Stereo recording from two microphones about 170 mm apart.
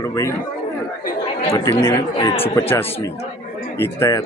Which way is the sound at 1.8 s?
25° left (ahead or behind).